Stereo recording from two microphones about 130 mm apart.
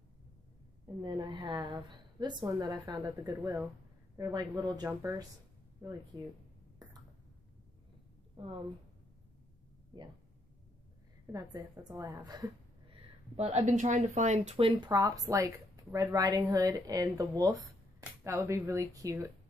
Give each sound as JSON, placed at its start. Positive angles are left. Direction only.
{"t": 1.0, "sound": "a woman's voice", "side_deg": -35}
{"t": 3.3, "sound": "speech", "side_deg": -15}
{"t": 4.2, "sound": "a woman's voice", "side_deg": -30}
{"t": 11.3, "sound": "a woman's voice", "side_deg": -35}
{"t": 13.4, "sound": "speech", "side_deg": -55}
{"t": 14.8, "sound": "a woman's voice", "side_deg": -30}